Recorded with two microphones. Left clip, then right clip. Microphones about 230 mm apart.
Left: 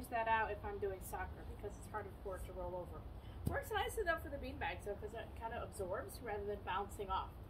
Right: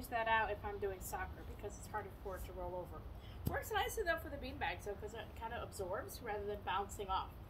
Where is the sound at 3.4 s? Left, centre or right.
Centre.